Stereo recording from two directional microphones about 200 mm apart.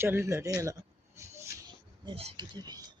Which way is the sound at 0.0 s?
10° right (ahead or behind).